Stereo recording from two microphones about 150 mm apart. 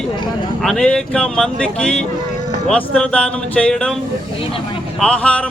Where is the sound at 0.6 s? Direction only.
5° left (ahead or behind).